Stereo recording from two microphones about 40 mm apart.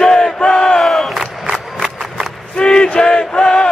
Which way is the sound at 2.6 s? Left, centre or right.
Left.